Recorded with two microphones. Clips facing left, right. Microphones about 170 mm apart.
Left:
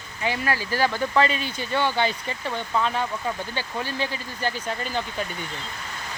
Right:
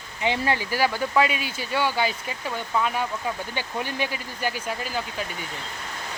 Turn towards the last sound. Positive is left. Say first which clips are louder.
# left 1 dB
turn(degrees=-5)  # may be behind; listen again after turning